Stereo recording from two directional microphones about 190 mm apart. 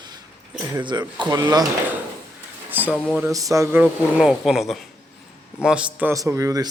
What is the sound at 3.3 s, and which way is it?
A man's voice, 15° right (ahead or behind).